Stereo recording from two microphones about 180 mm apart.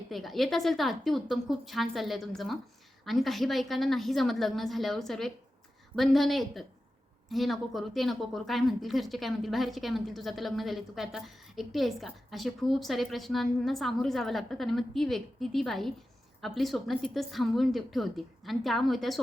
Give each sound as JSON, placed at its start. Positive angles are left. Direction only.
{"t": 0.1, "sound": "speech", "side_deg": 0}